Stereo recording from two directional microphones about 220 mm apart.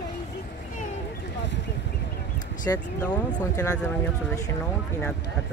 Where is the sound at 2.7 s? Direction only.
10° left (ahead or behind).